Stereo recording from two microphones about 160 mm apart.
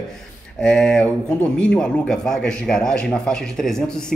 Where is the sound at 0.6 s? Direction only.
5° left (ahead or behind).